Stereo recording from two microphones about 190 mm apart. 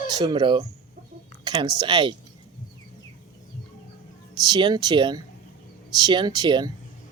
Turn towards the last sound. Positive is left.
turn(degrees=-20)  # may be behind; listen again after turning